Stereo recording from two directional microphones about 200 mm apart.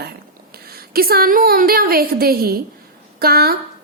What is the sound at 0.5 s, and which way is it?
A woman's voice, 50° right (ahead or behind).